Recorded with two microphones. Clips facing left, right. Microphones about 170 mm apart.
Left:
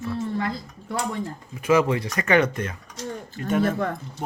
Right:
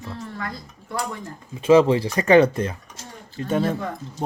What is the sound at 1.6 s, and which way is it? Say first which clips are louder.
A man's voice: right 5 dB; 30° right (ahead or behind).